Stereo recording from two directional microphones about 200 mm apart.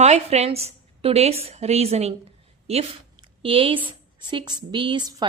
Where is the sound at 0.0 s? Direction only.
35° right (ahead or behind).